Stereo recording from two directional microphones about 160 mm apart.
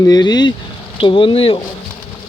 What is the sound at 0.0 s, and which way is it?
Speech, 25° left (ahead or behind).